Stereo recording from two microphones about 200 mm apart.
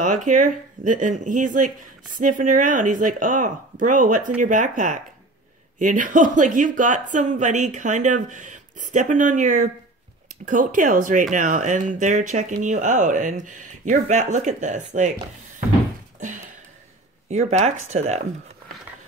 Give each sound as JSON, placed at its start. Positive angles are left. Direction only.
{"t": 0.0, "sound": "speech", "side_deg": -40}
{"t": 16.2, "sound": "a sound", "side_deg": -40}
{"t": 17.3, "sound": "speech", "side_deg": -35}